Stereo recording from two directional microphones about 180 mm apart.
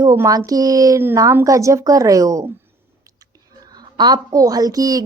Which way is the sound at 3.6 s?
20° right (ahead or behind).